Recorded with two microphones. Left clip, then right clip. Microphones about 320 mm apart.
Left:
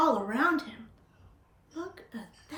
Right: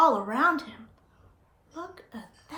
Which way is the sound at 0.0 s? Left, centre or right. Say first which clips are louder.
Right 4 dB; centre.